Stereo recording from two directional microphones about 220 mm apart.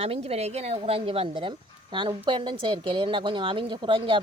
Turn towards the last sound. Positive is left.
turn(degrees=-20)  # may be behind; listen again after turning